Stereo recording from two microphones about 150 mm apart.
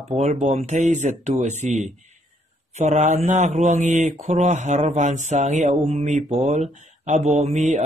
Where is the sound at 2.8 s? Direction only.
50° right (ahead or behind).